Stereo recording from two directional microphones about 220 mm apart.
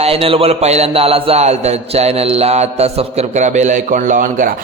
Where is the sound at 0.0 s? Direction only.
25° right (ahead or behind).